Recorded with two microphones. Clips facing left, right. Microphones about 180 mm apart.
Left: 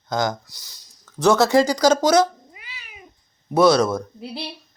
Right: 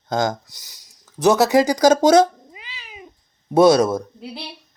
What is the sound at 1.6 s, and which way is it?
Speech, 45° right (ahead or behind).